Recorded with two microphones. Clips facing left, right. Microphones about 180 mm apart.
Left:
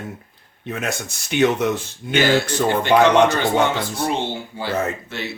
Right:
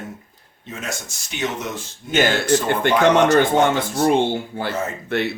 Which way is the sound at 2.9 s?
55° left (ahead or behind).